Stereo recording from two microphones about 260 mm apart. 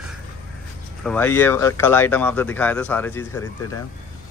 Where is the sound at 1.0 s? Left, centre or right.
Centre.